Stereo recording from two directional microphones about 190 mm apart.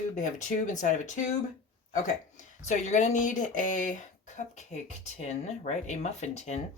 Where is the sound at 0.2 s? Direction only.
40° left (ahead or behind).